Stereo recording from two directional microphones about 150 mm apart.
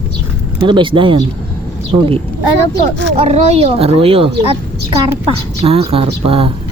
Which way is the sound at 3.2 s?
45° right (ahead or behind).